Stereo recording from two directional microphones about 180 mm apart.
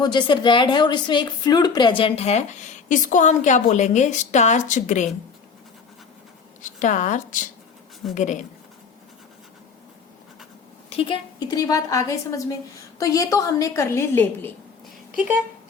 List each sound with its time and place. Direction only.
0.0 s a woman's voice: 25° left (ahead or behind); by 5.0 s 45° left (ahead or behind)
6.6 s a woman's voice: 45° left (ahead or behind)
10.8 s a woman's voice: 30° left (ahead or behind); by 14.5 s 10° left (ahead or behind)
15.1 s speech: 5° right (ahead or behind)